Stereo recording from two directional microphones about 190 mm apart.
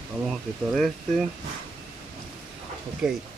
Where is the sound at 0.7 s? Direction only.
Centre (ahead or behind).